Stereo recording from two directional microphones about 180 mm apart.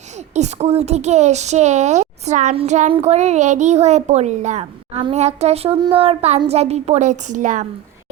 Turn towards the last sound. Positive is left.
turn(degrees=-45)  # may be behind; listen again after turning